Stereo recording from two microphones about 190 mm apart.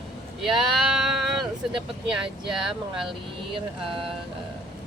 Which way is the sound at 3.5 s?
30° right (ahead or behind).